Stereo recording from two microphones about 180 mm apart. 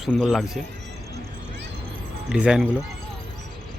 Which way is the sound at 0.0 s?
Centre (ahead or behind).